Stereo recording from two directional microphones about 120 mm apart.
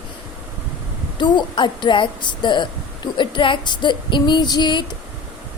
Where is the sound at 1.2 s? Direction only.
40° left (ahead or behind).